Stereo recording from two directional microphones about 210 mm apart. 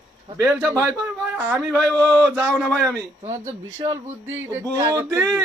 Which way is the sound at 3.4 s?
15° right (ahead or behind).